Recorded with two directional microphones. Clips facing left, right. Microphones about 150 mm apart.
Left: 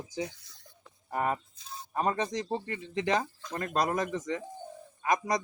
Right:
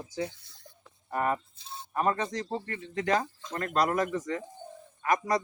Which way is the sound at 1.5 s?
30° right (ahead or behind).